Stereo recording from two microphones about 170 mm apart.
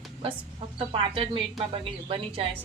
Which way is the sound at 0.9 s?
30° right (ahead or behind).